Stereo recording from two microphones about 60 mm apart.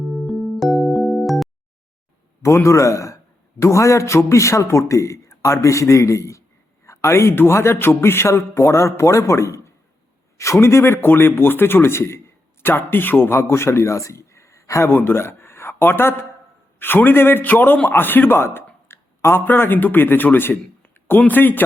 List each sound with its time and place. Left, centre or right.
0.1 s music: centre
2.6 s a man's voice: left
13.4 s a man's voice: left
14.8 s a man's voice: left